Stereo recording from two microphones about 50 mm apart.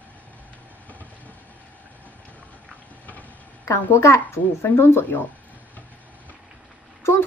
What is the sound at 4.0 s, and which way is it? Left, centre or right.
Speech, left.